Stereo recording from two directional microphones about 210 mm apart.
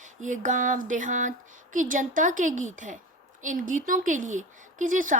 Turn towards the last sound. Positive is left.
turn(degrees=-40)  # may be behind; listen again after turning